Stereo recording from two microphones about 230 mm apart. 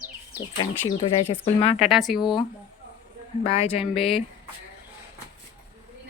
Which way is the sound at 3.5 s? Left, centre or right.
Left.